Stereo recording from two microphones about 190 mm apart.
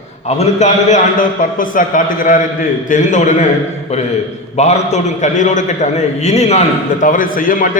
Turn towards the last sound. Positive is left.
turn(degrees=45)  # may be behind; listen again after turning